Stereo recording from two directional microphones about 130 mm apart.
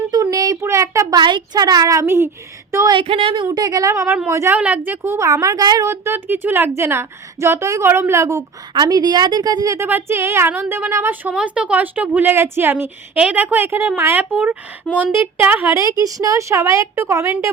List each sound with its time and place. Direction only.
0.1 s a sound: 30° right (ahead or behind)
1.2 s speech: 35° right (ahead or behind)
3.0 s speech: 50° right (ahead or behind)
3.4 s speech: 30° right (ahead or behind)
5.9 s a woman's voice: 15° right (ahead or behind)